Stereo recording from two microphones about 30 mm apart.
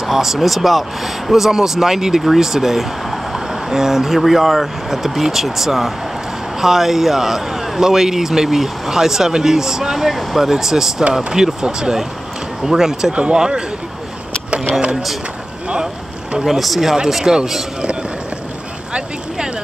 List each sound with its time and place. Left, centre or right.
0.0 s speech: centre
11.4 s speech: right
12.6 s speech: centre
13.1 s speech: right
13.4 s speech: right
16.3 s speech: centre
17.2 s speech: right